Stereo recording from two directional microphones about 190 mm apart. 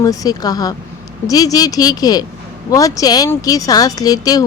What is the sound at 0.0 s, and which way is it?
A woman's voice, 20° left (ahead or behind).